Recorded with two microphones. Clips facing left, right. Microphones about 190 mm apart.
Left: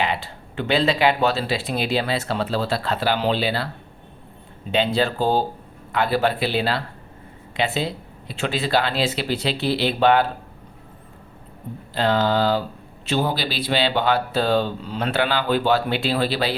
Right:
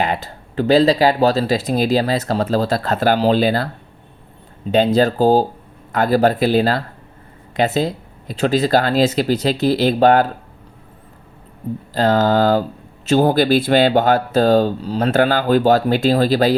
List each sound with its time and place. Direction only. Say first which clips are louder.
0.0 s speech: right 4 dB; 45° right (ahead or behind)
4.7 s speech: right 6 dB; 40° right (ahead or behind)
11.9 s speech: right 5 dB; 45° right (ahead or behind)